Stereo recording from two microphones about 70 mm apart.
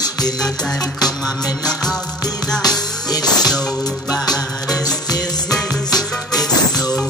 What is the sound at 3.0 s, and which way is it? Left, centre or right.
Music, left.